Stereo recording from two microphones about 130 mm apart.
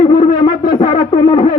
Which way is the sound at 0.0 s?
30° left (ahead or behind).